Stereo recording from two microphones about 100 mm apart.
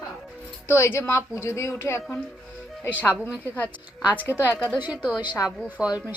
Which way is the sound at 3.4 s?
15° left (ahead or behind).